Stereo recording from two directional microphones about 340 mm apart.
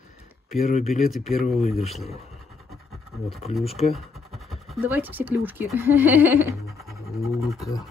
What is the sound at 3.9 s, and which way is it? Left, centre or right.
Speech, centre.